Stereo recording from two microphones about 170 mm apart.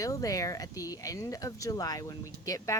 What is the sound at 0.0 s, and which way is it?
Speech, 20° left (ahead or behind).